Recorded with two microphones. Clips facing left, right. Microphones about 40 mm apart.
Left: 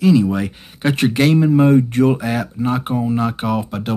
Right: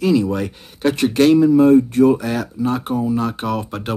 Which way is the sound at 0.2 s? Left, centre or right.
Centre.